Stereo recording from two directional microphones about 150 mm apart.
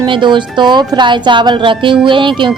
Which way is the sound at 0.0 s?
30° right (ahead or behind).